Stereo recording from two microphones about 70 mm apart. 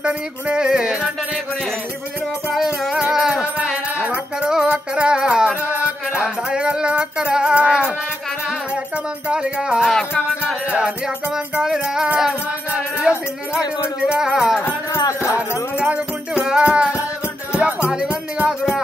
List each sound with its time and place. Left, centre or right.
0.0 s music: centre
2.5 s music: centre
9.3 s music: centre
15.0 s music: left
15.9 s music: centre